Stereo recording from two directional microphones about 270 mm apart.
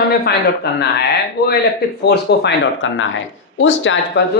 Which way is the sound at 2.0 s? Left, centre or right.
Left.